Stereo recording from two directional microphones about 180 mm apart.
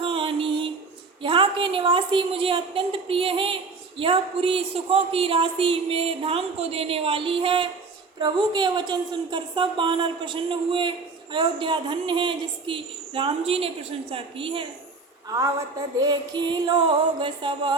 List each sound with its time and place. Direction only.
0.0 s music: 30° right (ahead or behind)
1.2 s a woman's voice: 30° right (ahead or behind)
16.0 s a woman's voice: 25° right (ahead or behind)